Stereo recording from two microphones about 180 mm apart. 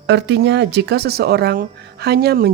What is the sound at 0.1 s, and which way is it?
Speech, 75° right (ahead or behind).